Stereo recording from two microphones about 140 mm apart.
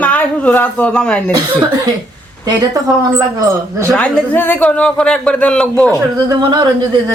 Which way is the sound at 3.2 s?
25° right (ahead or behind).